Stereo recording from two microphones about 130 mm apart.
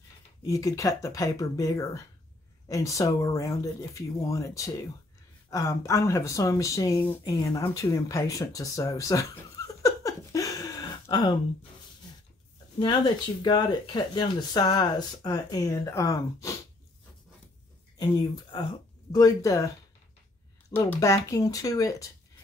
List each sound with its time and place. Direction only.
0.5 s speech: 25° left (ahead or behind)
9.8 s a sound: 25° left (ahead or behind)
12.7 s speech: 35° left (ahead or behind)
17.9 s speech: 30° left (ahead or behind)
21.0 s speech: 25° left (ahead or behind)